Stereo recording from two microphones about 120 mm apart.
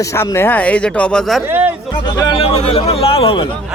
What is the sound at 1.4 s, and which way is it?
Speech, 15° right (ahead or behind).